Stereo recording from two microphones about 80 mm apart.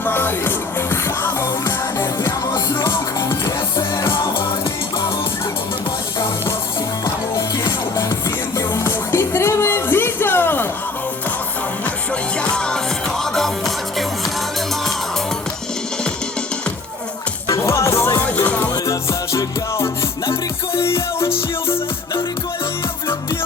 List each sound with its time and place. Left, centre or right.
0.0 s music: left
8.5 s music: left
12.4 s music: centre
17.5 s music: left
18.3 s music: centre
18.9 s music: left